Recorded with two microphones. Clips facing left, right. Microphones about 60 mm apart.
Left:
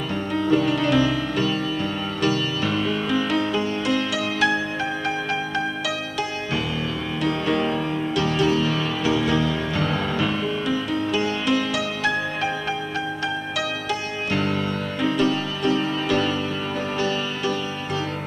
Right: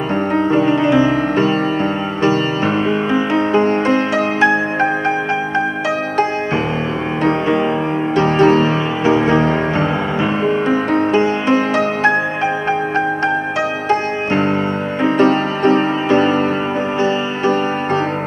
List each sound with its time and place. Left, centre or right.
0.3 s music: right
7.2 s music: right
8.2 s music: right
13.8 s music: right